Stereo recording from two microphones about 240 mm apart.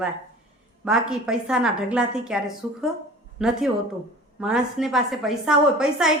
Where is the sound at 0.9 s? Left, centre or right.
Centre.